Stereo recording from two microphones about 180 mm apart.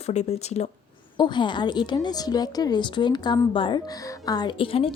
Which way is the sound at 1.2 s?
25° left (ahead or behind).